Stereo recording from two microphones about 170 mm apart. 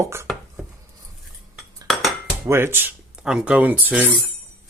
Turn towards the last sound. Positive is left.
turn(degrees=-10)  # may be behind; listen again after turning